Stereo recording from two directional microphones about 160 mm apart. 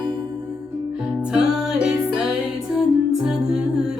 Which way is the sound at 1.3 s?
5° right (ahead or behind).